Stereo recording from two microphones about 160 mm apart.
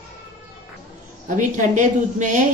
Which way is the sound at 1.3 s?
50° right (ahead or behind).